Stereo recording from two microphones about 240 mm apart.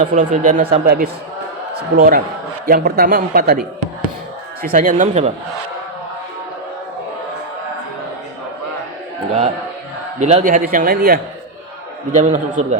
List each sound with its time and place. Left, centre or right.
0.0 s speech: right
4.6 s speech: right
10.2 s speech: right